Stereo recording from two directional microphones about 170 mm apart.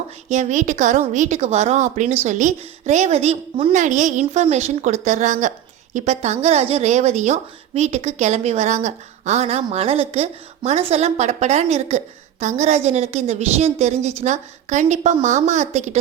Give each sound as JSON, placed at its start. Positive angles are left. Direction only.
{"t": 0.3, "sound": "a woman's voice", "side_deg": -45}